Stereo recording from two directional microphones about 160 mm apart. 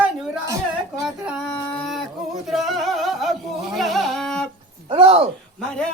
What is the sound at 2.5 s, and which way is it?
Music, centre (ahead or behind).